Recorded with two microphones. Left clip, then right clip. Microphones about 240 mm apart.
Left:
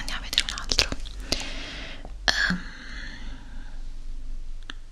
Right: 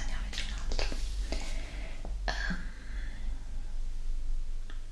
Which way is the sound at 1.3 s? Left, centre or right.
Left.